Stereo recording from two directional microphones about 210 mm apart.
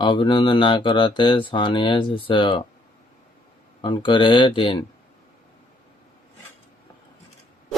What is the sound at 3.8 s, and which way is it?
Speech, 25° left (ahead or behind).